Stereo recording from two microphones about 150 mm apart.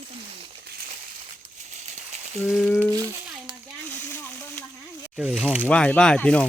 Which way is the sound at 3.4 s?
15° left (ahead or behind).